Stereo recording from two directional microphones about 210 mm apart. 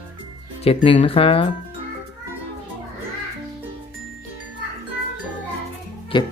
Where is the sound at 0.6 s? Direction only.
30° left (ahead or behind).